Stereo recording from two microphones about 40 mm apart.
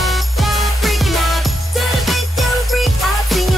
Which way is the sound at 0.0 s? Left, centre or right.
Centre.